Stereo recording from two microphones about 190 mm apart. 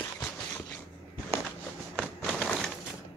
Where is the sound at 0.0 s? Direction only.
10° left (ahead or behind).